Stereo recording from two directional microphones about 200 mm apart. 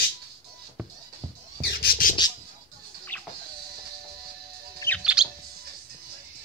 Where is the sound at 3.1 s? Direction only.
10° left (ahead or behind).